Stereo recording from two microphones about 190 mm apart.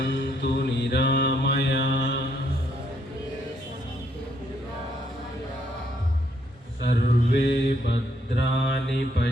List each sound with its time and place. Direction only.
0.0 s mantra: 65° left (ahead or behind)
6.8 s mantra: 60° left (ahead or behind)